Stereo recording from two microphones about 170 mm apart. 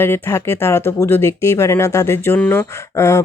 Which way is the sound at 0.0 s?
15° left (ahead or behind).